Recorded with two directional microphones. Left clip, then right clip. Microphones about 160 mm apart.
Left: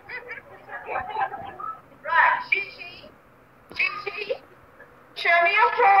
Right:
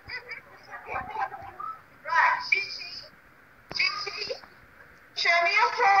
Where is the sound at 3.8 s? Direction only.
30° left (ahead or behind).